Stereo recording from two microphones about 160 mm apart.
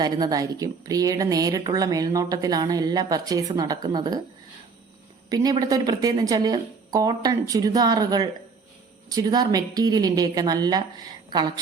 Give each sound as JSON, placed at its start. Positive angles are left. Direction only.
{"t": 0.0, "sound": "a woman's voice", "side_deg": -25}
{"t": 5.3, "sound": "a woman's voice", "side_deg": -25}